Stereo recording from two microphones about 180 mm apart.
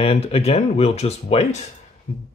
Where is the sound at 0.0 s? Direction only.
35° left (ahead or behind).